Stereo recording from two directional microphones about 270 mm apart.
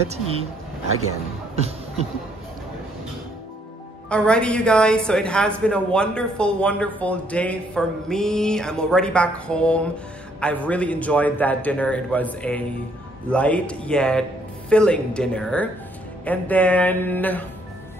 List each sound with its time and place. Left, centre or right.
0.1 s speech: right
1.5 s music: right
4.1 s a woman's voice: centre